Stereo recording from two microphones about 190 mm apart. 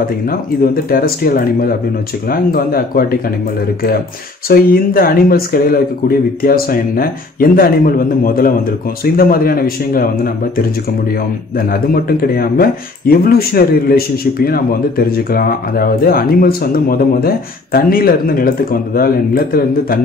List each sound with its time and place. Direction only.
0.8 s speech: 50° left (ahead or behind)
4.5 s speech: 50° left (ahead or behind)
11.5 s speech: 50° left (ahead or behind)